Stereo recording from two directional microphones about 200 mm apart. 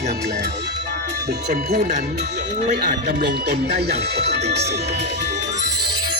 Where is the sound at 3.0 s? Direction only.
55° right (ahead or behind).